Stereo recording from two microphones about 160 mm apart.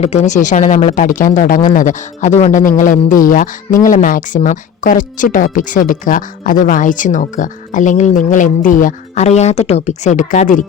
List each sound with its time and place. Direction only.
0.0 s speech: 45° left (ahead or behind)